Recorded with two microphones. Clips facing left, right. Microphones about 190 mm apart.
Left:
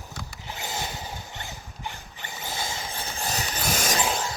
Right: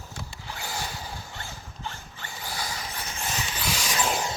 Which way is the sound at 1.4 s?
20° left (ahead or behind).